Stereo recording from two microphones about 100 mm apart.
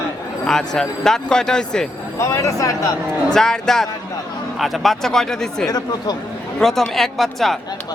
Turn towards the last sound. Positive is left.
turn(degrees=0)  # may be behind; listen again after turning